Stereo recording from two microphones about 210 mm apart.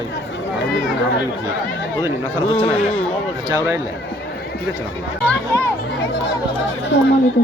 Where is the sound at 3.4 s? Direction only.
15° right (ahead or behind).